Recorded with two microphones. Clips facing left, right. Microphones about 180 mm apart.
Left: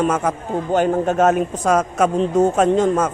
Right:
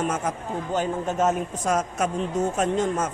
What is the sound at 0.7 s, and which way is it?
A man's voice, 60° left (ahead or behind).